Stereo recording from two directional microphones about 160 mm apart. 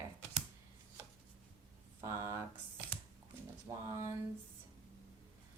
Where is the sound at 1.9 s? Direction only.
20° right (ahead or behind).